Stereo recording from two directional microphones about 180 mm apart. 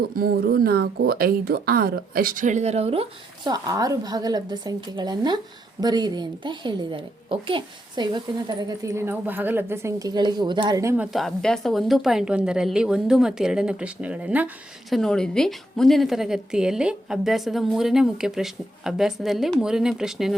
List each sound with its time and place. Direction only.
0.2 s speech: 55° right (ahead or behind); by 3.5 s 30° right (ahead or behind)
3.5 s a woman's voice: 20° right (ahead or behind)
10.9 s a woman's voice: 5° right (ahead or behind)